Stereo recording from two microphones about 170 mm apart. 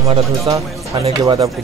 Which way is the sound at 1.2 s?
25° right (ahead or behind).